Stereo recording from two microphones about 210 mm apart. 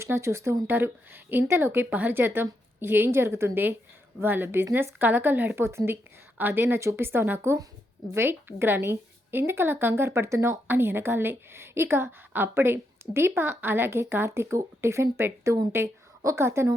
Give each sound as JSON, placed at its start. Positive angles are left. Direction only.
{"t": 0.0, "sound": "a woman's voice", "side_deg": -15}